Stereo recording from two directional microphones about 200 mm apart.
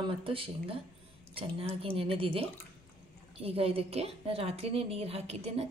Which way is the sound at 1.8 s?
30° right (ahead or behind).